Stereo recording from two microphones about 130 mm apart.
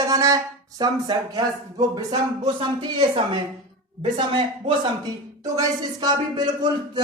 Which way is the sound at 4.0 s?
40° right (ahead or behind).